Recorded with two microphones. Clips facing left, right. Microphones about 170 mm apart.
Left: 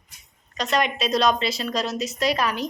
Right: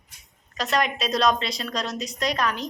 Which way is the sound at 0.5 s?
Centre (ahead or behind).